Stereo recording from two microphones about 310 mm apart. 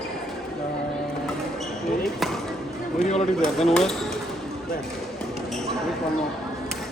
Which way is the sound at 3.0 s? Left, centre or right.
Left.